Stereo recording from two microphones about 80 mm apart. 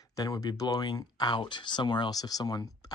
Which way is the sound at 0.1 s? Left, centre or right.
Left.